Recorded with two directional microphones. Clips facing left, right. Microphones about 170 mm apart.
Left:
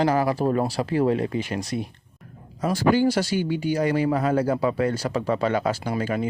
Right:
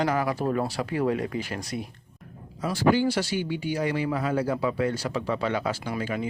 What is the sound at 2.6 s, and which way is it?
Speech, 45° left (ahead or behind).